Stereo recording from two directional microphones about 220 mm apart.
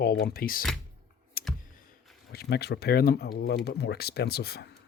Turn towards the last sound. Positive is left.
turn(degrees=45)  # may be behind; listen again after turning